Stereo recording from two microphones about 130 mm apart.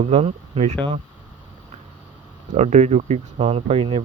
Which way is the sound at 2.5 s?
60° right (ahead or behind).